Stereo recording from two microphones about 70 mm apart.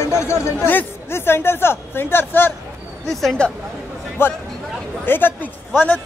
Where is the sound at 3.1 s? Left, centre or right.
Centre.